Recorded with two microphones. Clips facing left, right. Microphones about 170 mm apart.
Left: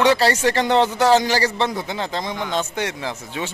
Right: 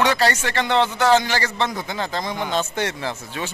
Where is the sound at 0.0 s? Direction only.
30° left (ahead or behind).